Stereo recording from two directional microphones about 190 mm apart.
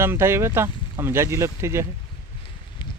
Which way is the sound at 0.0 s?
15° right (ahead or behind).